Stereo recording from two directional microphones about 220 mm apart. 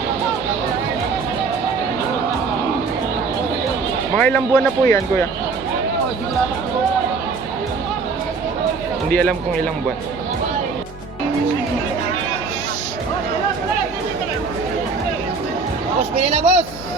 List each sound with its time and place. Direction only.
4.2 s speech: 5° left (ahead or behind)
9.0 s speech: 5° left (ahead or behind)
16.2 s speech: 30° right (ahead or behind)